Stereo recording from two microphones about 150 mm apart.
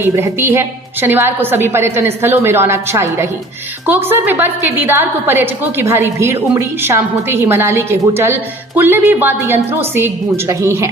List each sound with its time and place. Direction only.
0.0 s a woman's voice: 15° right (ahead or behind)